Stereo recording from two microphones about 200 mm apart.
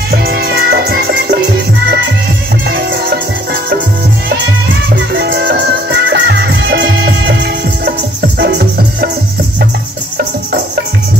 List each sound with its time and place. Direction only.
0.1 s music: 50° right (ahead or behind)
4.9 s music: 55° right (ahead or behind)
8.4 s music: 55° right (ahead or behind)